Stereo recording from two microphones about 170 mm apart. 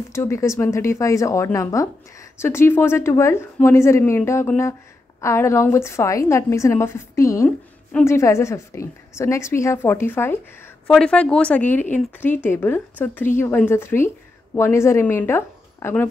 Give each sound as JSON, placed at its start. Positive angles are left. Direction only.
{"t": 0.1, "sound": "a woman's voice", "side_deg": 15}